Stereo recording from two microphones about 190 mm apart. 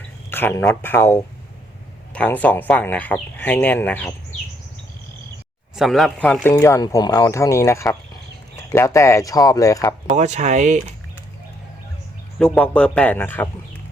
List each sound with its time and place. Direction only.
0.3 s speech: 10° left (ahead or behind)
5.7 s speech: centre (ahead or behind)
6.5 s speech: 15° left (ahead or behind)
10.1 s speech: 35° right (ahead or behind)
12.5 s speech: 5° left (ahead or behind)